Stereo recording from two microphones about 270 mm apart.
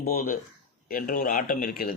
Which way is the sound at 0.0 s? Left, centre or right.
Left.